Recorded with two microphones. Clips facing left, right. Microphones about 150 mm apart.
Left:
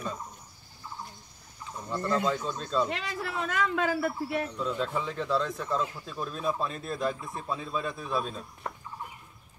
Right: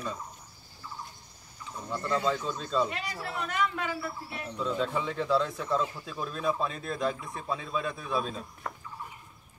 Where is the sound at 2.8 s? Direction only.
90° left.